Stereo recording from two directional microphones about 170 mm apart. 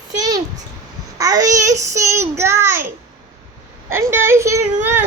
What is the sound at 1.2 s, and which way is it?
A child's voice, 20° right (ahead or behind).